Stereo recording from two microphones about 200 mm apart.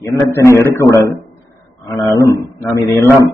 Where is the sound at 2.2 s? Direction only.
15° left (ahead or behind).